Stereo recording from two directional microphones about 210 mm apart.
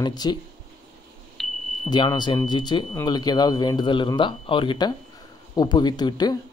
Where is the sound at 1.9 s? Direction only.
20° left (ahead or behind).